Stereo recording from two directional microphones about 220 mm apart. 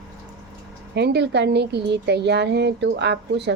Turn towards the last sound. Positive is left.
turn(degrees=-50)  # may be behind; listen again after turning